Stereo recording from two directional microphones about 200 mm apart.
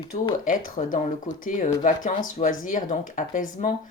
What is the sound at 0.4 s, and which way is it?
Speech, 40° left (ahead or behind).